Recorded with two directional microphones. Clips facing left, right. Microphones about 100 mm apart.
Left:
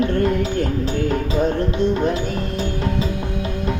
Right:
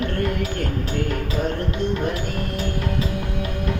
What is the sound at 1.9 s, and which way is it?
Music, 20° left (ahead or behind).